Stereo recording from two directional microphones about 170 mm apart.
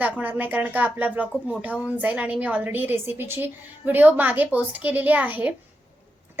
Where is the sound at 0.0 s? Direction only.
10° right (ahead or behind).